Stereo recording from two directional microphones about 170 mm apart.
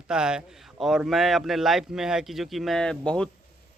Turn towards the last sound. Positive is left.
turn(degrees=5)  # may be behind; listen again after turning